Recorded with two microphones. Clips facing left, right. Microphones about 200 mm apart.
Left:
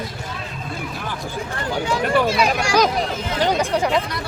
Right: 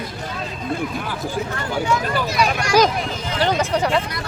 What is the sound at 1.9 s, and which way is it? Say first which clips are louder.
Speech: left 6 dB; 30° left (ahead or behind).